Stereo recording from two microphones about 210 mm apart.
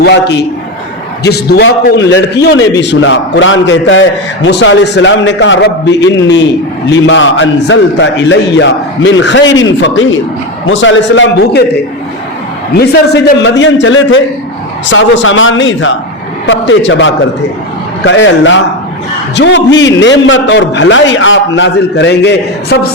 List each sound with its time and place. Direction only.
0.0 s a man's voice: 55° left (ahead or behind)
12.7 s a man's voice: 50° left (ahead or behind)